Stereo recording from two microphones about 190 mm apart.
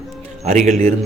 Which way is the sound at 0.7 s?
35° right (ahead or behind).